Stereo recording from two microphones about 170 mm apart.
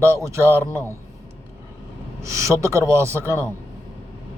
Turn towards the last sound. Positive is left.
turn(degrees=-15)  # may be behind; listen again after turning